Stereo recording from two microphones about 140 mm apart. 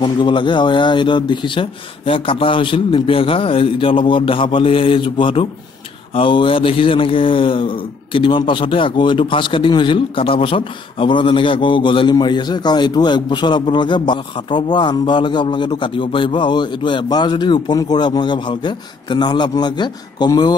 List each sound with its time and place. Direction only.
0.0 s speech: 35° left (ahead or behind)